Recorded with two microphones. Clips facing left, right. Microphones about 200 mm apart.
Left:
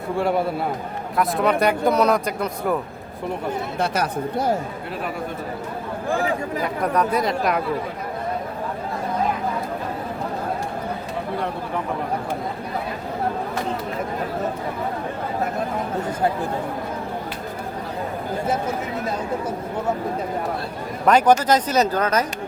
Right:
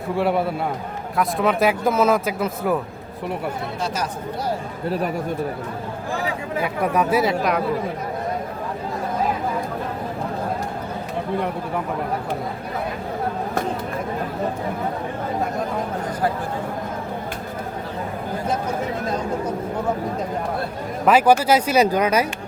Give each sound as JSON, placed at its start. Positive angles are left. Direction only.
{"t": 0.2, "sound": "speech", "side_deg": 0}
{"t": 3.8, "sound": "speech", "side_deg": 60}
{"t": 6.6, "sound": "speech", "side_deg": -5}
{"t": 21.1, "sound": "speech", "side_deg": -5}